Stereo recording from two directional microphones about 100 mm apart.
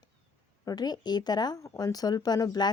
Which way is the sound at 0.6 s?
40° left (ahead or behind).